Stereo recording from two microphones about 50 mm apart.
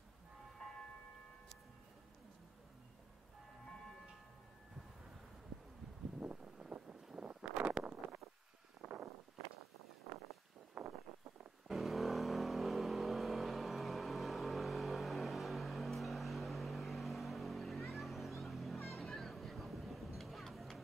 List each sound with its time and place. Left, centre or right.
0.6 s bell: centre
3.6 s music: centre
6.1 s wind: right
7.2 s wind noise: right
8.8 s a sound: right
10.7 s a sound: right
11.6 s vehicle: centre